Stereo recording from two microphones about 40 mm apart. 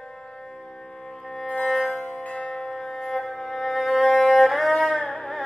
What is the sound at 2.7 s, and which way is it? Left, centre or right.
Music, centre.